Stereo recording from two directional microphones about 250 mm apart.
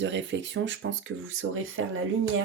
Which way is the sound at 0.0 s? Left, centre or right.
Right.